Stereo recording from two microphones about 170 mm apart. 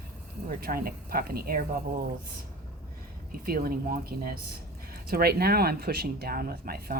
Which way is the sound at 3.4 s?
60° right (ahead or behind).